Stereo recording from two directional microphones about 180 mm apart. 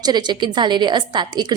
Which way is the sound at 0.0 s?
25° right (ahead or behind).